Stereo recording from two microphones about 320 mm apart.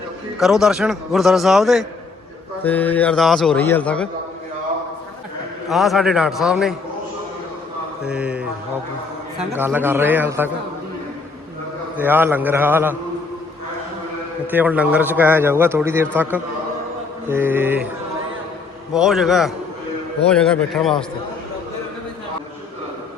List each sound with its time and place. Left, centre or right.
0.3 s a man's voice: centre
5.6 s a man's voice: centre
8.0 s mantra: centre
9.6 s a man's voice: centre
11.9 s a man's voice: centre
14.5 s a man's voice: centre
18.9 s a man's voice: centre